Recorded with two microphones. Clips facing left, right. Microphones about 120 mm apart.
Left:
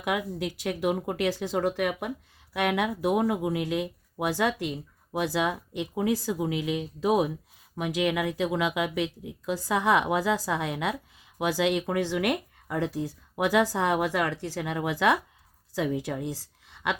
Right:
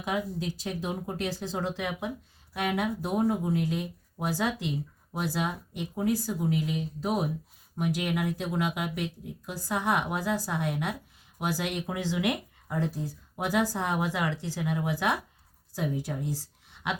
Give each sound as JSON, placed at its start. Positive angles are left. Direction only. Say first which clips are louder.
{"t": 0.0, "sound": "speech", "louder": "left 2 dB", "side_deg": 70}
{"t": 5.1, "sound": "a woman's voice", "louder": "left 4 dB", "side_deg": 90}